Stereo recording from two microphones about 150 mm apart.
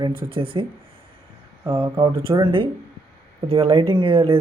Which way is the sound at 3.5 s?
40° right (ahead or behind).